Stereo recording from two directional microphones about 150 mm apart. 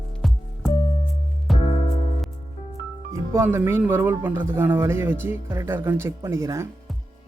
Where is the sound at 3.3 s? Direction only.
15° right (ahead or behind).